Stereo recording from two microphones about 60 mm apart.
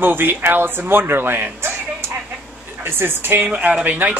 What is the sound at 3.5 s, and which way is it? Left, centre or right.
Speech, right.